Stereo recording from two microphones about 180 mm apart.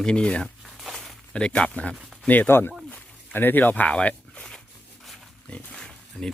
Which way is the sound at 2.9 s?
10° left (ahead or behind).